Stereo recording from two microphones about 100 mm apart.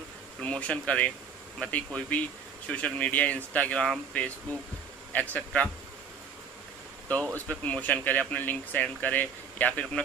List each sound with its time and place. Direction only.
0.4 s speech: 10° left (ahead or behind)
7.2 s speech: 30° right (ahead or behind)
7.4 s speech: 15° left (ahead or behind)